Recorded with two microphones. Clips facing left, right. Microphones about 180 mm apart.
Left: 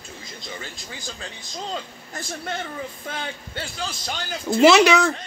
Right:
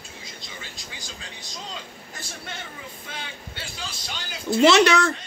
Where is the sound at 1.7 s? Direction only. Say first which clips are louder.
Left 6 dB; 50° left (ahead or behind).